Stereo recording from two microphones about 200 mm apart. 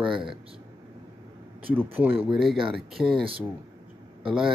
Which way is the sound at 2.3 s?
Centre (ahead or behind).